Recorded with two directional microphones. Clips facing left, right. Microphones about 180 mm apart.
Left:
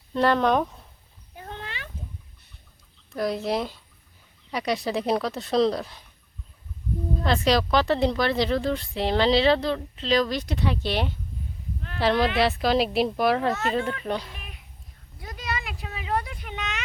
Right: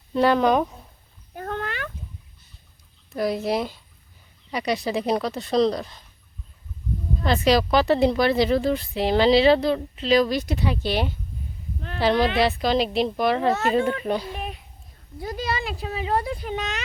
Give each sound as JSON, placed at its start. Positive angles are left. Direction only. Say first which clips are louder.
{"t": 0.1, "sound": "speech", "louder": "right 2 dB", "side_deg": 0}
{"t": 1.4, "sound": "a sound", "louder": "right 8 dB", "side_deg": -50}
{"t": 3.2, "sound": "speech", "louder": "right 2 dB", "side_deg": -5}
{"t": 7.3, "sound": "speech", "louder": "right 3 dB", "side_deg": -5}
{"t": 13.5, "sound": "speech", "louder": "right 4 dB", "side_deg": -30}
{"t": 14.0, "sound": "speech", "louder": "right 4 dB", "side_deg": -10}
{"t": 14.3, "sound": "a sound", "louder": "right 12 dB", "side_deg": -30}